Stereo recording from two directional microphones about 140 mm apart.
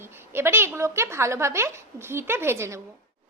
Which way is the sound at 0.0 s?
15° right (ahead or behind).